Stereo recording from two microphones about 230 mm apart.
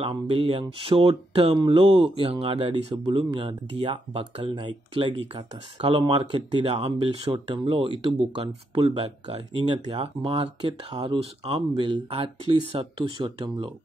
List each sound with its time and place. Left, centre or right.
0.0 s speech: right